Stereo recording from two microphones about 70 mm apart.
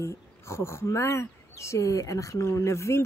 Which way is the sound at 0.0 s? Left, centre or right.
Left.